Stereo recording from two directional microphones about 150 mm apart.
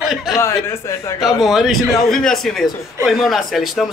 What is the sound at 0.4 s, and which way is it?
Speech, 20° left (ahead or behind).